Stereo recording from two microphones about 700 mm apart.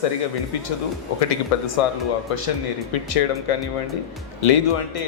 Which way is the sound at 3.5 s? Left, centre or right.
Left.